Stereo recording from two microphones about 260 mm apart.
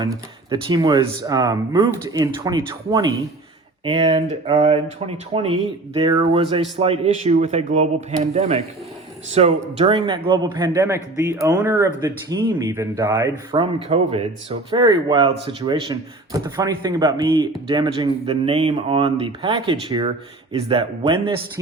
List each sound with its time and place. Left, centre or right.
0.5 s speech: centre